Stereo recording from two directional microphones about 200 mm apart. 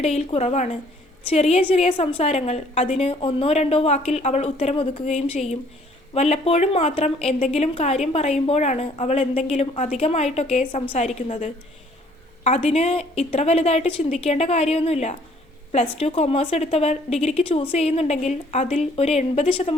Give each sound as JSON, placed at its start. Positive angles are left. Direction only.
{"t": 0.0, "sound": "speech", "side_deg": 30}